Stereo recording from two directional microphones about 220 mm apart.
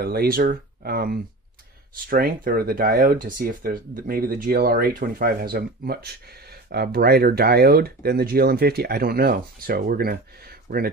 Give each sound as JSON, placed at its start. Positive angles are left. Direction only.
{"t": 0.0, "sound": "speech", "side_deg": -45}